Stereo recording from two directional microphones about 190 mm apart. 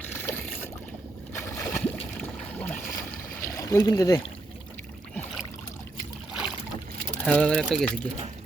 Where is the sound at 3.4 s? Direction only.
15° left (ahead or behind).